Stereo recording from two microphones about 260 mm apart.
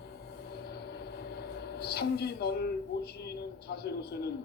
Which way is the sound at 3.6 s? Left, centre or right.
Left.